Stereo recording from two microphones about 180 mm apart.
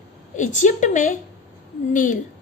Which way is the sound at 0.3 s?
45° left (ahead or behind).